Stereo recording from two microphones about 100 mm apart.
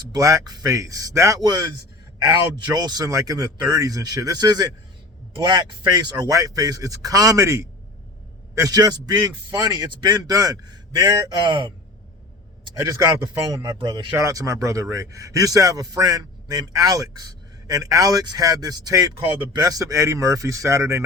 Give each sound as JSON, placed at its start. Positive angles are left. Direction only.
{"t": 0.1, "sound": "a man's voice", "side_deg": -35}
{"t": 2.7, "sound": "a man's voice", "side_deg": -40}
{"t": 12.7, "sound": "a man's voice", "side_deg": -35}
{"t": 13.8, "sound": "speech", "side_deg": -45}
{"t": 14.3, "sound": "a man's voice", "side_deg": -30}